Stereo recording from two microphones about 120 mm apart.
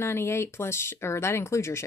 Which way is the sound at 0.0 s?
20° left (ahead or behind).